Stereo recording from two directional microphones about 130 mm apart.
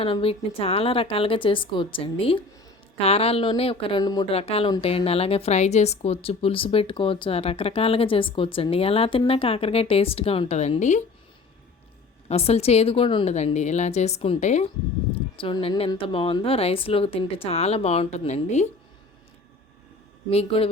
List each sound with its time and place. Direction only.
0.0 s speech: 45° left (ahead or behind)
4.0 s speech: 30° left (ahead or behind)
4.3 s speech: 50° left (ahead or behind)
12.3 s speech: 50° left (ahead or behind)
13.2 s speech: 60° left (ahead or behind)
15.4 s speech: 40° left (ahead or behind); by 18.7 s 60° left (ahead or behind)
20.3 s speech: 50° left (ahead or behind)